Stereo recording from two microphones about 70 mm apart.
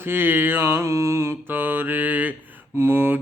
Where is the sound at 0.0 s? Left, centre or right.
Right.